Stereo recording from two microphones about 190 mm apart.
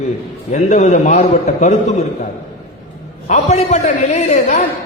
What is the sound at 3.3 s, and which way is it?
A man's voice, 40° left (ahead or behind).